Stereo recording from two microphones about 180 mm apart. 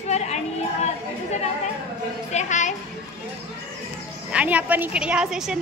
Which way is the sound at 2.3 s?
40° left (ahead or behind).